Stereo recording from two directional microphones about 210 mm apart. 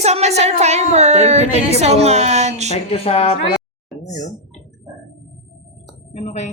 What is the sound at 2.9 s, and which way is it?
Speech, 30° left (ahead or behind).